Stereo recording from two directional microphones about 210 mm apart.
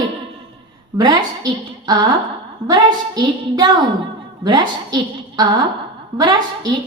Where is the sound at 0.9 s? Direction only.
20° right (ahead or behind).